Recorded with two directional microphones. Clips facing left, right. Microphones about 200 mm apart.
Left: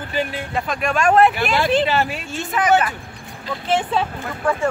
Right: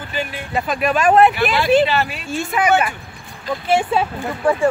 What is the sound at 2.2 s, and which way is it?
Speech, 10° right (ahead or behind).